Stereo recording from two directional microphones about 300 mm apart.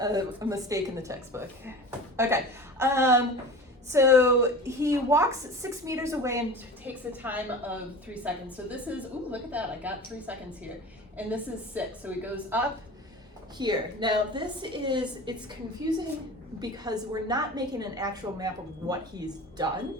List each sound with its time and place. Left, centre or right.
0.0 s a woman's voice: centre
16.6 s a woman's voice: centre